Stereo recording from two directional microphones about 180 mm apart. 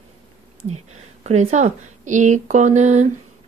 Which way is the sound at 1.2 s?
35° right (ahead or behind).